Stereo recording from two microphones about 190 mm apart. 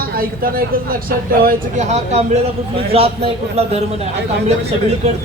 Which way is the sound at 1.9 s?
35° right (ahead or behind).